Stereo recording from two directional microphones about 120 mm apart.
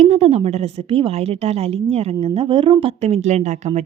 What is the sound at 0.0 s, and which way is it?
Speech, 65° right (ahead or behind).